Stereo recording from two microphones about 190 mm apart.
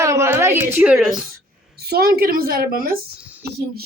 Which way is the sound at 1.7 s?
55° right (ahead or behind).